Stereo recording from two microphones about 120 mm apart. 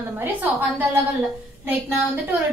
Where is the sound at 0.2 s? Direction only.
15° right (ahead or behind).